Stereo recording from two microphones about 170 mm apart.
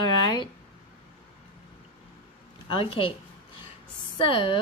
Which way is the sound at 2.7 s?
30° left (ahead or behind).